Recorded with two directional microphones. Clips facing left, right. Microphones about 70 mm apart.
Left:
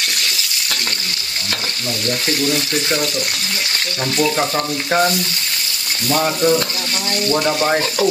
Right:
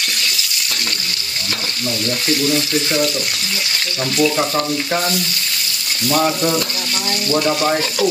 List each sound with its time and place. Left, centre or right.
6.0 s frying: centre
7.6 s speech: left